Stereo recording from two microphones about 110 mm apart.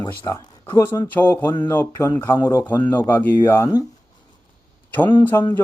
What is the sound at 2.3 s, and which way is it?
Speech, 35° left (ahead or behind).